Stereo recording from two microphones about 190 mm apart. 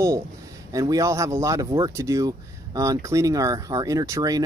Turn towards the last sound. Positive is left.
turn(degrees=-20)  # may be behind; listen again after turning